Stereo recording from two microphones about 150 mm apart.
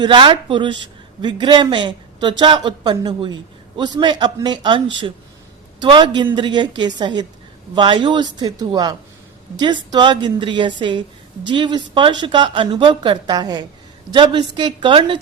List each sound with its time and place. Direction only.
0.0 s a woman's voice: 35° right (ahead or behind)